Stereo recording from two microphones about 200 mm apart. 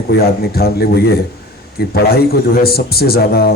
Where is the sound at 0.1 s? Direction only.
50° left (ahead or behind).